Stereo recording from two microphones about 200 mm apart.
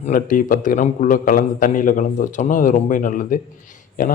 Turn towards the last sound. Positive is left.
turn(degrees=40)  # may be behind; listen again after turning